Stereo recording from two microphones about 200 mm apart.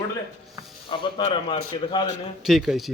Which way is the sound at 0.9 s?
25° left (ahead or behind).